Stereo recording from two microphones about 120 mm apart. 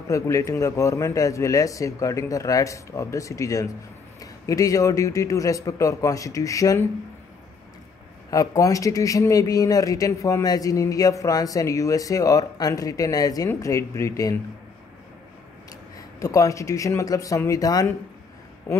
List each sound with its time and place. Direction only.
0.1 s a man's voice: 25° left (ahead or behind)
8.3 s a man's voice: 30° left (ahead or behind)
16.2 s a man's voice: 25° left (ahead or behind)